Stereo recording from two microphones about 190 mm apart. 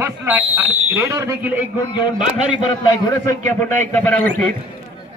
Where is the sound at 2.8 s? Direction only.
15° left (ahead or behind).